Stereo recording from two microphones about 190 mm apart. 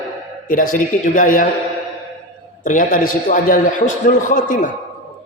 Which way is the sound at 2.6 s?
45° left (ahead or behind).